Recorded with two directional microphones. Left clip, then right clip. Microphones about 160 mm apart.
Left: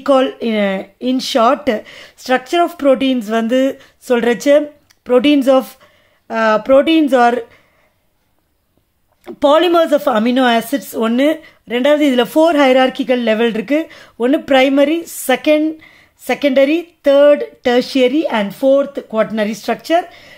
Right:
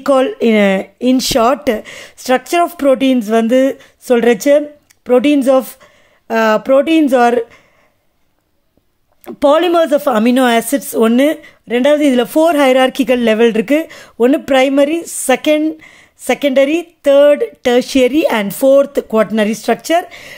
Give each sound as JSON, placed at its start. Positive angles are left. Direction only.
{"t": 0.0, "sound": "speech", "side_deg": -30}
{"t": 9.2, "sound": "speech", "side_deg": -25}
{"t": 19.2, "sound": "speech", "side_deg": -25}